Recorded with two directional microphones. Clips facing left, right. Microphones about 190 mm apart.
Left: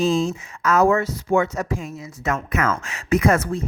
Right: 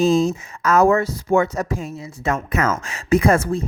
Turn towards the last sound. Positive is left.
turn(degrees=-30)  # may be behind; listen again after turning